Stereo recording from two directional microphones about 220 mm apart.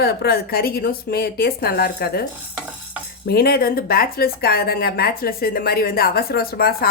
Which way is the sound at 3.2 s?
45° left (ahead or behind).